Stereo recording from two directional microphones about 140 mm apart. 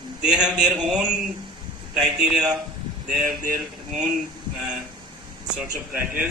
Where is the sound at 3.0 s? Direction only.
90° right.